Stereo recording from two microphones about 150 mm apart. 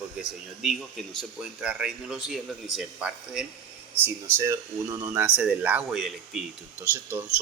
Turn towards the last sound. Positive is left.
turn(degrees=-15)  # may be behind; listen again after turning